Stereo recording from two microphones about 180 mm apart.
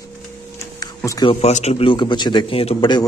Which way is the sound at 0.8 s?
20° left (ahead or behind).